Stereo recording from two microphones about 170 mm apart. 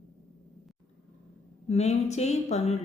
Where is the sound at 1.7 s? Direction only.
40° left (ahead or behind).